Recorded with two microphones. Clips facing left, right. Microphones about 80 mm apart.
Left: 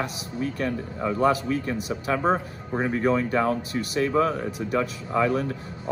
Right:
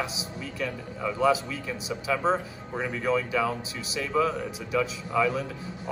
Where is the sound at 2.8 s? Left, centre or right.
Left.